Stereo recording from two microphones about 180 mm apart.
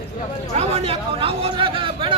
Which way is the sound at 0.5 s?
35° right (ahead or behind).